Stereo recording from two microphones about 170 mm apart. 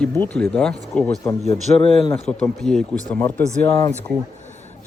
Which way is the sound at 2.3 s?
5° left (ahead or behind).